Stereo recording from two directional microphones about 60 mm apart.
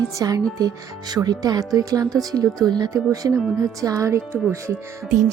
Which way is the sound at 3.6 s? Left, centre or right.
Right.